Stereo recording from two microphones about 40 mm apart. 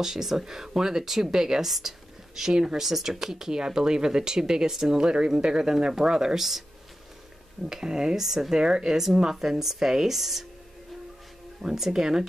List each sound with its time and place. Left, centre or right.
0.0 s speech: centre
7.7 s speech: centre
11.6 s speech: centre